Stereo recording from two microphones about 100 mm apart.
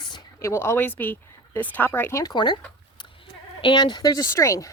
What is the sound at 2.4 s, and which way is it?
Speech, 50° left (ahead or behind).